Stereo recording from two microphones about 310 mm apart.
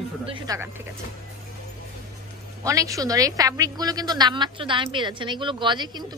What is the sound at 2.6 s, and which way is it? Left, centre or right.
A woman's voice, centre.